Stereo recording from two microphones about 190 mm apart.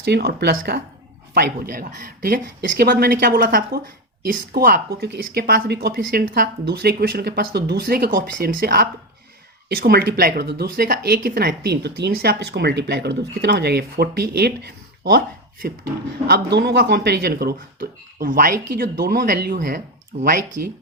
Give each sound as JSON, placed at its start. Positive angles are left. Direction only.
{"t": 0.0, "sound": "speech", "side_deg": -60}
{"t": 16.2, "sound": "speech", "side_deg": -60}